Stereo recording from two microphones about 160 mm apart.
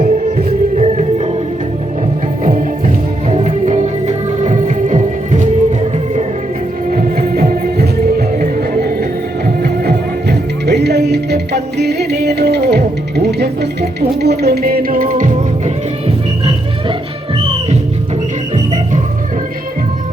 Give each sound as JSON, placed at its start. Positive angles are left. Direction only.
{"t": 0.0, "sound": "music", "side_deg": -50}
{"t": 2.4, "sound": "music", "side_deg": -50}
{"t": 6.9, "sound": "music", "side_deg": -70}
{"t": 9.6, "sound": "music", "side_deg": -90}